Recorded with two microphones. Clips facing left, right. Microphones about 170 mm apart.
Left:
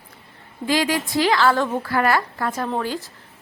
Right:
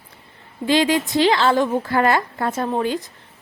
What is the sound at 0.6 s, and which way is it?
A woman's voice, 25° right (ahead or behind).